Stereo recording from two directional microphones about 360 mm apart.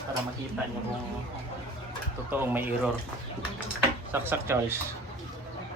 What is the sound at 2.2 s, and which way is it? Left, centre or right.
Speech, centre.